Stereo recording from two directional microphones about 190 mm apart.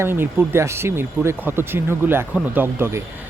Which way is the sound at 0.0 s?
10° right (ahead or behind).